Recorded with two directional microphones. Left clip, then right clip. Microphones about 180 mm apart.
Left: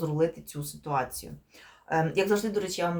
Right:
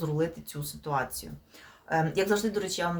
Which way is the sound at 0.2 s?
5° left (ahead or behind).